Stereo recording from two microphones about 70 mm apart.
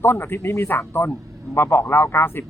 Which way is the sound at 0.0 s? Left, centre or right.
Left.